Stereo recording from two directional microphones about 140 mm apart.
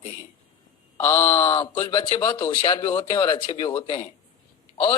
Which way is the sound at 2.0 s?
35° left (ahead or behind).